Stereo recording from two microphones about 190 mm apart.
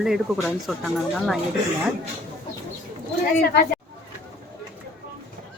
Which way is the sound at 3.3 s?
55° left (ahead or behind).